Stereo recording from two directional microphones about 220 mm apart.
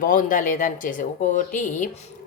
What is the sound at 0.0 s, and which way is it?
A woman's voice, 40° left (ahead or behind).